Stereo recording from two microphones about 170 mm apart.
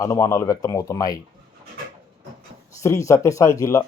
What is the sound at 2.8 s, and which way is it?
Speech, 15° left (ahead or behind).